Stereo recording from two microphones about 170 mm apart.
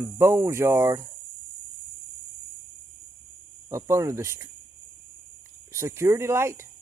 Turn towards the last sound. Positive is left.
turn(degrees=-15)  # may be behind; listen again after turning